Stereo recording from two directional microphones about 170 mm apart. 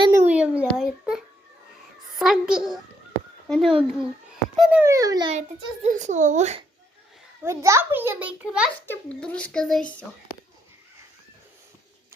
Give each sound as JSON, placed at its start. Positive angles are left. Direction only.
{"t": 0.1, "sound": "a sound", "side_deg": -10}
{"t": 0.7, "sound": "babbling", "side_deg": -5}
{"t": 2.1, "sound": "a child's voice", "side_deg": 0}
{"t": 4.8, "sound": "a child's voice", "side_deg": -20}
{"t": 5.3, "sound": "a child's voice", "side_deg": -45}
{"t": 7.4, "sound": "a child's voice", "side_deg": -15}
{"t": 8.9, "sound": "a child's voice", "side_deg": 5}